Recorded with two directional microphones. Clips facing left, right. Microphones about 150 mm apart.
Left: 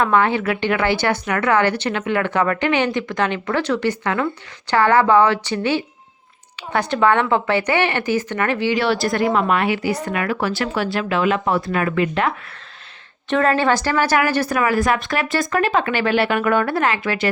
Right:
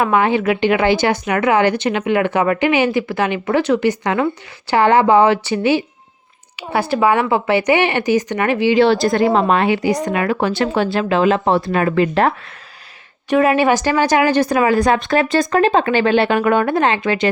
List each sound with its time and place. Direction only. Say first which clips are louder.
0.0 s speech: right 2 dB; 15° right (ahead or behind); by 12.3 s 35° right (ahead or behind)
13.3 s speech: right 3 dB; 10° right (ahead or behind)